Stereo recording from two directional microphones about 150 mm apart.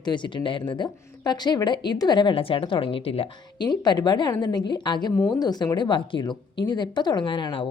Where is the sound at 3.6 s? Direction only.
30° left (ahead or behind).